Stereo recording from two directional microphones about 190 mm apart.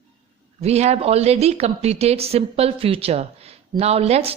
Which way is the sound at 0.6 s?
35° right (ahead or behind).